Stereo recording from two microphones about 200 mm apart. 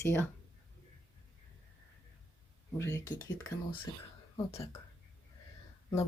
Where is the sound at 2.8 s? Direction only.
15° left (ahead or behind).